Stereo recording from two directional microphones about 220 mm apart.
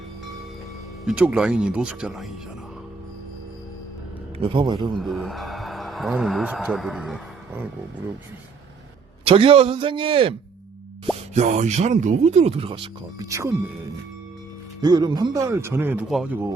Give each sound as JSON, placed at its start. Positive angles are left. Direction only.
{"t": 1.0, "sound": "speech", "side_deg": -5}
{"t": 4.4, "sound": "speech", "side_deg": -25}
{"t": 4.9, "sound": "speech", "side_deg": 0}
{"t": 9.2, "sound": "speech", "side_deg": -25}
{"t": 14.8, "sound": "speech", "side_deg": -20}